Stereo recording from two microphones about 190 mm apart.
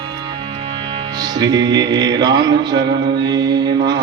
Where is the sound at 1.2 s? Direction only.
20° right (ahead or behind).